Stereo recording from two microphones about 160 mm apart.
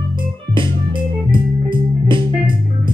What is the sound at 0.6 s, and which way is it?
Music, 30° right (ahead or behind).